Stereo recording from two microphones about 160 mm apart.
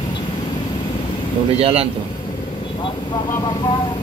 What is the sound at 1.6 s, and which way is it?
Speech, 35° right (ahead or behind).